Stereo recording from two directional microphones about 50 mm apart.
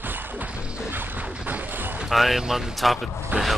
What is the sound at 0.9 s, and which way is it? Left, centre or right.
Music, right.